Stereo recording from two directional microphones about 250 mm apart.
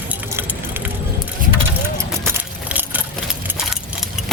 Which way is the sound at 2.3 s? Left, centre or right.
Centre.